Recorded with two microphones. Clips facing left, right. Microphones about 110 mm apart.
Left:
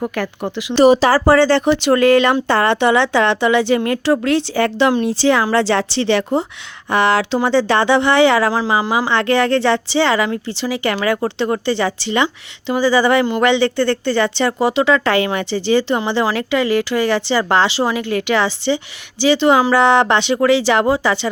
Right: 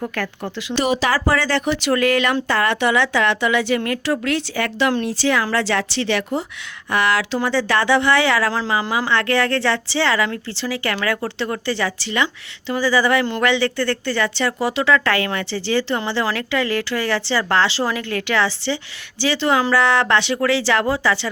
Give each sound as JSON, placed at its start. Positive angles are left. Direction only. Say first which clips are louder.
{"t": 0.2, "sound": "speech", "louder": "left 2 dB", "side_deg": 15}
{"t": 0.8, "sound": "speech", "louder": "left 9 dB", "side_deg": 35}